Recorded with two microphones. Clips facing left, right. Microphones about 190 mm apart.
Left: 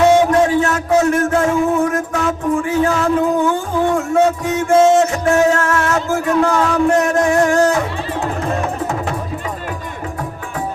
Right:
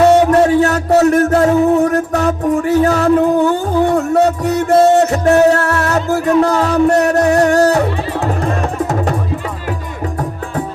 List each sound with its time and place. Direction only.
0.0 s music: 35° right (ahead or behind)